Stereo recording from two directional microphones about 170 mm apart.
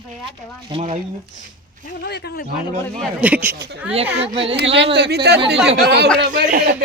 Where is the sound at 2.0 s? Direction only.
70° left (ahead or behind).